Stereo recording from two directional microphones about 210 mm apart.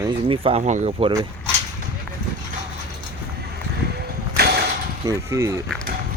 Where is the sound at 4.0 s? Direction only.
50° right (ahead or behind).